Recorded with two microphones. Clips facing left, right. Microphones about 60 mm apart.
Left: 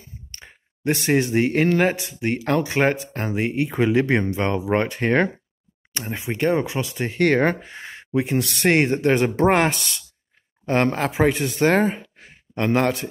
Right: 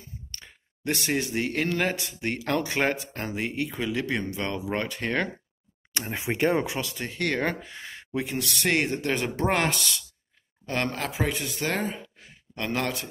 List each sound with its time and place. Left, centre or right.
0.3 s a sound: left
1.0 s speech: left
3.7 s speech: left
5.9 s speech: centre
7.1 s speech: left
7.4 s speech: left
8.3 s speech: left
12.5 s speech: left